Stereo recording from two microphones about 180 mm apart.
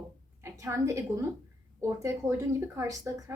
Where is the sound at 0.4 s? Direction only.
15° right (ahead or behind).